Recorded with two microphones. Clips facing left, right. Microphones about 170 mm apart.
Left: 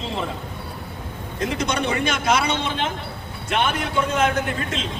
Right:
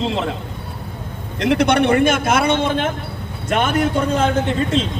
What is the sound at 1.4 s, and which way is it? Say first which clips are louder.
A man's voice: right 9 dB; 65° right (ahead or behind).